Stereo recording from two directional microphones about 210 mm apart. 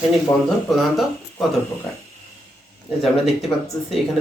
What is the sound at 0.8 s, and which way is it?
Speech, centre (ahead or behind).